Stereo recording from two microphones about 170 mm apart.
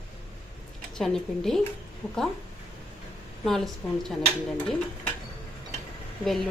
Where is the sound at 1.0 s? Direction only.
5° left (ahead or behind).